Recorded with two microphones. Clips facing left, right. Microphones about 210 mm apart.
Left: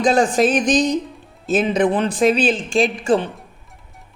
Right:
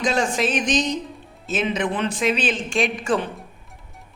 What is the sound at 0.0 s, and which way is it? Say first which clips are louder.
Speech: left 6 dB; 35° left (ahead or behind).